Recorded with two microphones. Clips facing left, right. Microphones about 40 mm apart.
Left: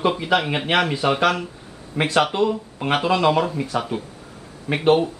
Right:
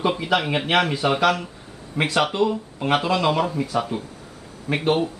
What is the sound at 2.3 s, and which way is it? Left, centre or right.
Speech, centre.